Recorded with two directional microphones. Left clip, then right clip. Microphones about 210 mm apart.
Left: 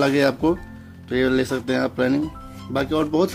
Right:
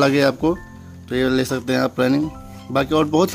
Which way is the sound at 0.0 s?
25° right (ahead or behind).